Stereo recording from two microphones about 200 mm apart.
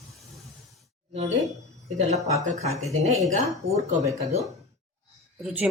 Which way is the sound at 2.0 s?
35° right (ahead or behind).